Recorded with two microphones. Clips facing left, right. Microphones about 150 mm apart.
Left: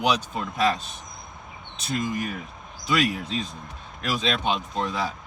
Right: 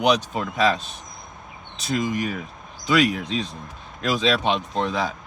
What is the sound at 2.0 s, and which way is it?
Speech, 90° right.